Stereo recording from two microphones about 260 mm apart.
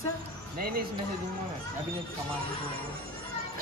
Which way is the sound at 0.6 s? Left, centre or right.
Right.